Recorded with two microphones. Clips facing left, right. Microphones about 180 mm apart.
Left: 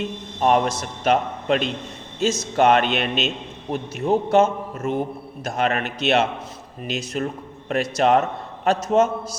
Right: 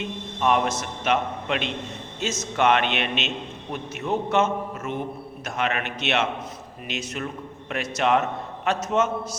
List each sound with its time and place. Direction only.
0.3 s a man's voice: 35° left (ahead or behind)